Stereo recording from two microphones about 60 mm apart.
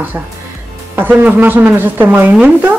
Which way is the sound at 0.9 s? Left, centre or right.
Right.